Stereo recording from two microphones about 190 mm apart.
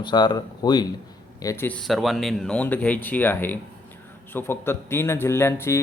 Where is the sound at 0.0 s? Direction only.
25° left (ahead or behind).